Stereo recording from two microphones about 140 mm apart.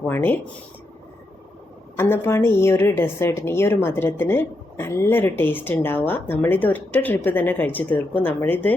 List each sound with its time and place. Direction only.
0.0 s a woman's voice: 15° left (ahead or behind)
2.0 s a woman's voice: 15° left (ahead or behind)